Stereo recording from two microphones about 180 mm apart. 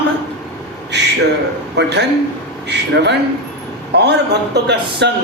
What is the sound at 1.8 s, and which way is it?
Speech, 70° right (ahead or behind).